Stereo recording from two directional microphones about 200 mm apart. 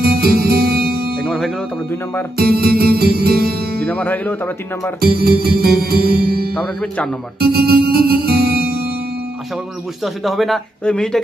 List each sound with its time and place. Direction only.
0.0 s music: 50° right (ahead or behind)
1.2 s music: centre (ahead or behind)
2.3 s speech: 50° right (ahead or behind)
3.8 s speech: 5° left (ahead or behind)
5.0 s speech: 50° right (ahead or behind)
6.5 s speech: 5° left (ahead or behind)
7.5 s music: 50° right (ahead or behind)
10.0 s speech: centre (ahead or behind)